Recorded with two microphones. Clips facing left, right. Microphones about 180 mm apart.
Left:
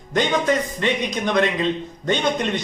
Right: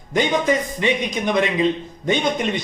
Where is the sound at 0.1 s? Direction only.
10° right (ahead or behind).